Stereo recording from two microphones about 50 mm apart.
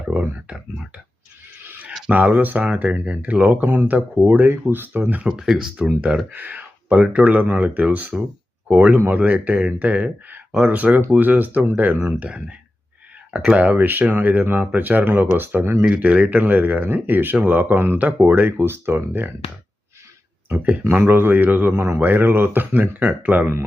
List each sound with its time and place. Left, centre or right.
0.4 s a sound: right
1.6 s a sound: right
2.0 s speech: right
5.3 s speech: centre
6.3 s speech: right
13.3 s speech: right
16.0 s speech: right
21.0 s speech: right
21.7 s a man's voice: right
22.0 s speech: right